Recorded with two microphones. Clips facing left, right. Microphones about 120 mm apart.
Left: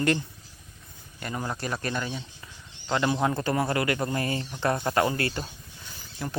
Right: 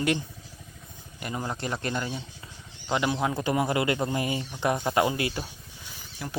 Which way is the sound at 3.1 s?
Centre (ahead or behind).